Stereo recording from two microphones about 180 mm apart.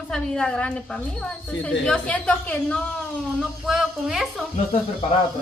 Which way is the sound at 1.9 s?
5° left (ahead or behind).